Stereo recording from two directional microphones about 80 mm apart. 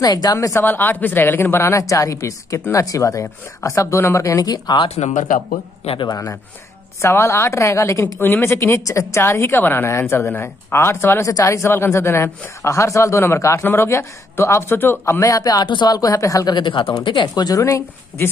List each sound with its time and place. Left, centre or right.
0.0 s speech: left
0.4 s speech: left
0.7 s speech: left
7.0 s speech: left
11.2 s speech: left
15.1 s speech: left
15.7 s speech: left
16.0 s speech: left
16.5 s speech: left
17.0 s speech: left
17.6 s speech: left